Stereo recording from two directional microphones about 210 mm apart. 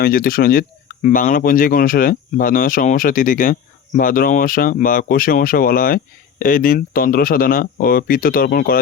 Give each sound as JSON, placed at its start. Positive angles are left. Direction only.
{"t": 0.0, "sound": "speech", "side_deg": 45}